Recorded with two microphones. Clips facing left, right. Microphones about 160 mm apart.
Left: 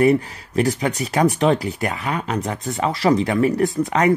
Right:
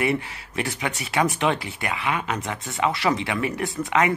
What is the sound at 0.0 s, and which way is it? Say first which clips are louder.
Speech: left 8 dB; 40° left (ahead or behind).